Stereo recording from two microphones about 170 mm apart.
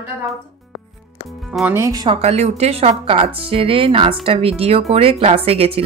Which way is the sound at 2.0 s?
40° right (ahead or behind).